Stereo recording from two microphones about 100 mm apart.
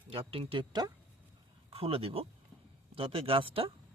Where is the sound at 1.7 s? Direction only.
70° right (ahead or behind).